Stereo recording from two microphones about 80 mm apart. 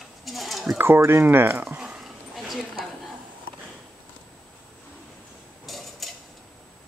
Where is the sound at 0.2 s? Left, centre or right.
Centre.